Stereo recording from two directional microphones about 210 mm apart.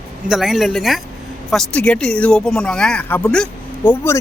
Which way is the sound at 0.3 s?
Centre (ahead or behind).